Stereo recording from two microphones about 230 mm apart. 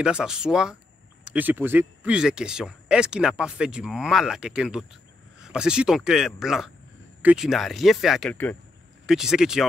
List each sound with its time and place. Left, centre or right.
0.0 s speech: centre